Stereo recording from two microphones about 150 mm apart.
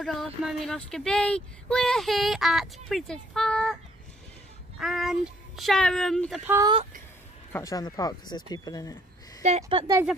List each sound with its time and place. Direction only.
0.0 s speech: centre (ahead or behind)
4.7 s speech: centre (ahead or behind)
6.6 s speech: 35° right (ahead or behind)
7.5 s speech: 25° left (ahead or behind)
9.4 s speech: 50° right (ahead or behind)